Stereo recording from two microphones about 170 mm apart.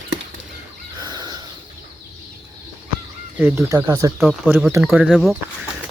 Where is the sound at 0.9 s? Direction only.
25° right (ahead or behind).